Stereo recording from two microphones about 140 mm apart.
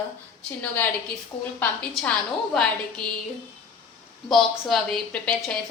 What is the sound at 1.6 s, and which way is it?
Speech, 10° left (ahead or behind).